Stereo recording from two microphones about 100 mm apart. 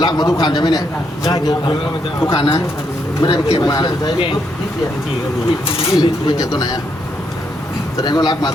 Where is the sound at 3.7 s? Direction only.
40° left (ahead or behind).